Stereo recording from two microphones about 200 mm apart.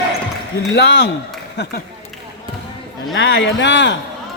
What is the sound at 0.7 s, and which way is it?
Speech, 60° left (ahead or behind).